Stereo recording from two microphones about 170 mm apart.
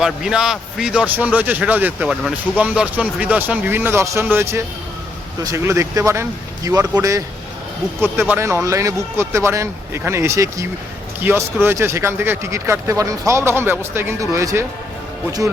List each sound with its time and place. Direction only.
0.0 s a man's voice: 5° right (ahead or behind); by 6.8 s 20° right (ahead or behind)
8.0 s a man's voice: 10° right (ahead or behind)